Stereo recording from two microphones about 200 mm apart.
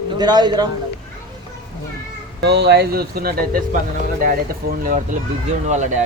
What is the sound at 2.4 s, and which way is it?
Speech, 55° right (ahead or behind).